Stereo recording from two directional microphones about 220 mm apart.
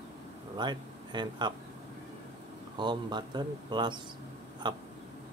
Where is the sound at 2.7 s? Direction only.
20° right (ahead or behind).